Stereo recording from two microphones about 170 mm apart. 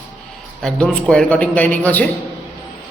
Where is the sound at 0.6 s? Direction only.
5° left (ahead or behind).